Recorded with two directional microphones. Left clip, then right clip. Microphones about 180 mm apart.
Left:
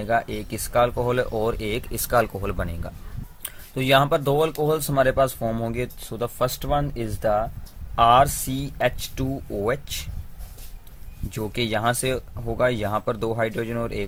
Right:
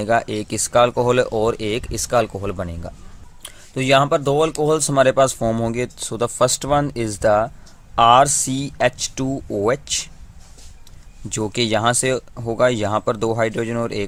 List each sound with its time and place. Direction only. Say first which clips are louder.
0.0 s speech: right 5 dB; 30° right (ahead or behind)
7.9 s speech: right 4 dB; 30° right (ahead or behind)
11.3 s speech: right 6 dB; 30° right (ahead or behind)